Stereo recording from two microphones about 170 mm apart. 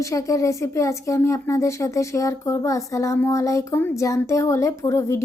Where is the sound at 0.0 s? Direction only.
20° left (ahead or behind).